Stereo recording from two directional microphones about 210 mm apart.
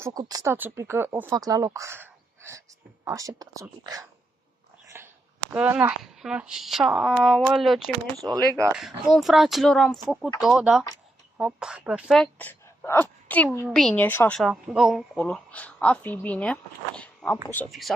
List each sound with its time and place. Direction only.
0.0 s a woman's voice: 20° right (ahead or behind); by 7.9 s centre (ahead or behind)
8.2 s speech: 15° right (ahead or behind)
8.7 s a woman's voice: centre (ahead or behind)